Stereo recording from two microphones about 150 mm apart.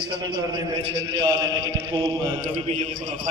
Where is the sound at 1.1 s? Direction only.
30° right (ahead or behind).